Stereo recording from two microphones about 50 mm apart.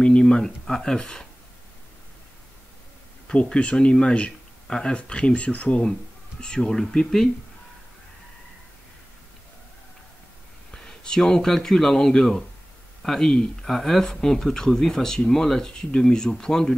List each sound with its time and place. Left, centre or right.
0.0 s a sound: centre
0.7 s speech: centre
3.3 s speech: left
6.4 s speech: centre
10.7 s speech: centre